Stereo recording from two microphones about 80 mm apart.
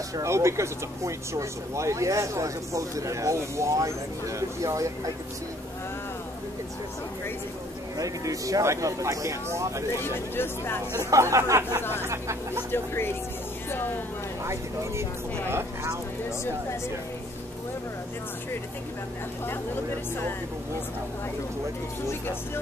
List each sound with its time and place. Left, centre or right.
0.1 s speech: right
8.0 s speech: right
10.0 s speech: left
11.1 s speech: right
12.7 s speech: left
14.4 s speech: right
15.5 s a sound: right